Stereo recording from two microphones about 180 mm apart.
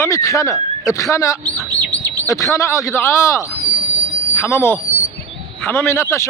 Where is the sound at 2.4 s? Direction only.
15° left (ahead or behind).